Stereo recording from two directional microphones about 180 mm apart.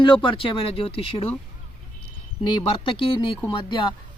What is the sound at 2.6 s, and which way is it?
Speech, 30° left (ahead or behind).